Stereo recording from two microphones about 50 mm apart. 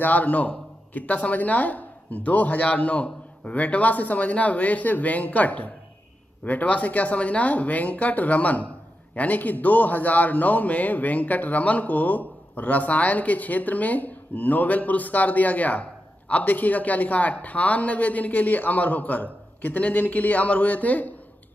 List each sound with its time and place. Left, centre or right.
0.0 s a man's voice: left